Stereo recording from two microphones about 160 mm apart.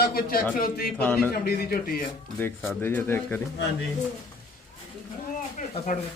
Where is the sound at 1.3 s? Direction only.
75° left (ahead or behind).